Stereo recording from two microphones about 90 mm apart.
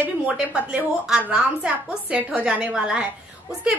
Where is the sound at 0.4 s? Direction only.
10° right (ahead or behind).